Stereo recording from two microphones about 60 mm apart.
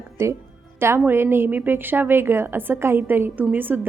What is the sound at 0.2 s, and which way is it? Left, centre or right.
A woman's voice, right.